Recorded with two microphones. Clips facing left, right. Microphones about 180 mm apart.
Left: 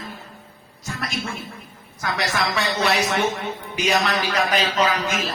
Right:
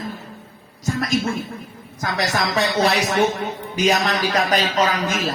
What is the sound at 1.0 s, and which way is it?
A man's voice, 35° right (ahead or behind).